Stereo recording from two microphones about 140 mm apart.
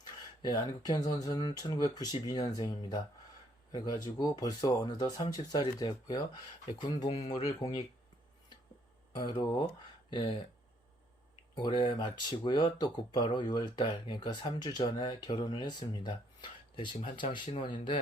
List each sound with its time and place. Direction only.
0.4 s speech: 30° left (ahead or behind)
9.1 s speech: 30° left (ahead or behind)
11.5 s speech: 35° left (ahead or behind)